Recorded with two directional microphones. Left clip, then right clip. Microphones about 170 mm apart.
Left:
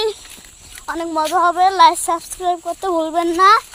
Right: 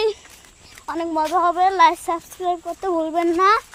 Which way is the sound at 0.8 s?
15° left (ahead or behind).